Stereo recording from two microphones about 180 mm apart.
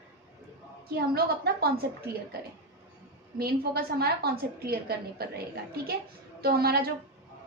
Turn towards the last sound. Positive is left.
turn(degrees=-60)  # may be behind; listen again after turning